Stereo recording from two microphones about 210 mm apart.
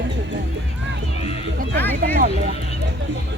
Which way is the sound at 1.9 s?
40° right (ahead or behind).